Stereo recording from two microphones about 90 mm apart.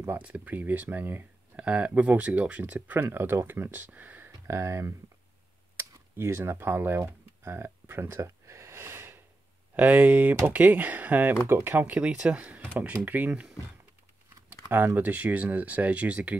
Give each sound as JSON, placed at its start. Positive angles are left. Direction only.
{"t": 0.2, "sound": "speech", "side_deg": -15}
{"t": 4.5, "sound": "speech", "side_deg": -35}
{"t": 5.8, "sound": "computer keyboard", "side_deg": -30}
{"t": 9.8, "sound": "speech", "side_deg": -15}
{"t": 14.5, "sound": "speech", "side_deg": -25}